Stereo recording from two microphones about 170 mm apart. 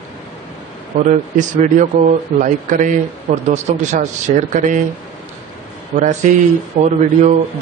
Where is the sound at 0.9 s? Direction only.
45° right (ahead or behind).